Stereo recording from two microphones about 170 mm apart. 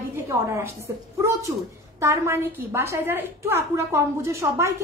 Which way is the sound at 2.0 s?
15° right (ahead or behind).